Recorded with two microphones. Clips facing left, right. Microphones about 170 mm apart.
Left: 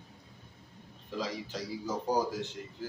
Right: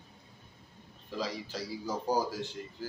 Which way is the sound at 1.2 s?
20° left (ahead or behind).